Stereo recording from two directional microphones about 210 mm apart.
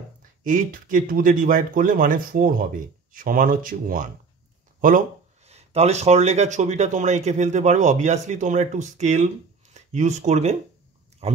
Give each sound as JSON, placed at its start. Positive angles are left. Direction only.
{"t": 0.4, "sound": "speech", "side_deg": -40}
{"t": 5.5, "sound": "speech", "side_deg": -30}